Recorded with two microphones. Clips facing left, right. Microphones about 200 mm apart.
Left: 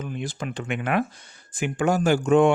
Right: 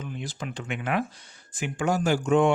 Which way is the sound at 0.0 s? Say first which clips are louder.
Left 4 dB; 55° left (ahead or behind).